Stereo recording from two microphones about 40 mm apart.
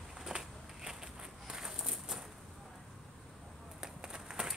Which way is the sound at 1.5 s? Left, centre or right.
Centre.